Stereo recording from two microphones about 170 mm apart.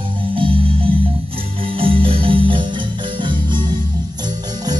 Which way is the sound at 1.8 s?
30° right (ahead or behind).